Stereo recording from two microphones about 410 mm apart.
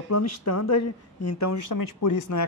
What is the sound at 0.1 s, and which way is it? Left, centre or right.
Speech, left.